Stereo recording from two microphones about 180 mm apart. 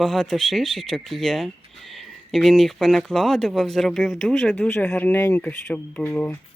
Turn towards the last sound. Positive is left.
turn(degrees=10)  # may be behind; listen again after turning